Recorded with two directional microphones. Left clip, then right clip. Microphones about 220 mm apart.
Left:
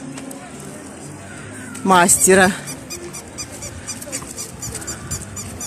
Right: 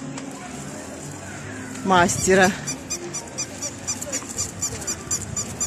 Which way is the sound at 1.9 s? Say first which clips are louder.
Left 5 dB; 30° left (ahead or behind).